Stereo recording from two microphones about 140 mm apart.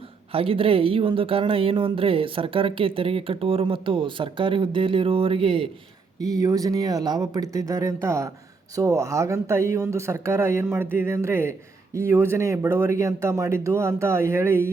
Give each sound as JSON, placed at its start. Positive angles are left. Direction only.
{"t": 0.3, "sound": "speech", "side_deg": -40}
{"t": 6.1, "sound": "speech", "side_deg": -25}